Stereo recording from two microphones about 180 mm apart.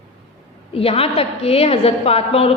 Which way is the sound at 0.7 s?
30° left (ahead or behind).